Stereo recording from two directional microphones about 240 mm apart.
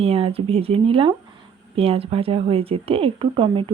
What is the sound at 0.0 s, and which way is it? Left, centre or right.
Speech, right.